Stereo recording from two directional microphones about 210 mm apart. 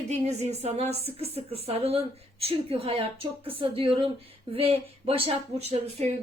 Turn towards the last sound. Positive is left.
turn(degrees=-30)  # may be behind; listen again after turning